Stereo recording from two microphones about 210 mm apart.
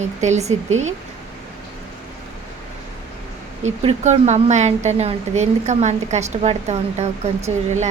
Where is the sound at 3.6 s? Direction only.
35° right (ahead or behind).